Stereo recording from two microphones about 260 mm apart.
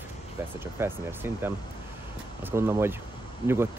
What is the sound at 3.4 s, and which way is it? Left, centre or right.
Speech, centre.